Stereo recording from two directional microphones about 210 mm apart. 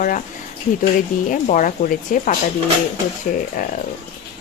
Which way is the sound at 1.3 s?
40° left (ahead or behind).